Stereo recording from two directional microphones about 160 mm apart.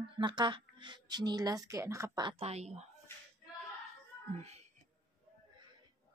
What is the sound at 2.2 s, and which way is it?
Speech, 40° right (ahead or behind).